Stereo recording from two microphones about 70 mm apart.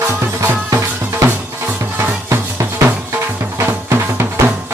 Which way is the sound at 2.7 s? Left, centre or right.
Right.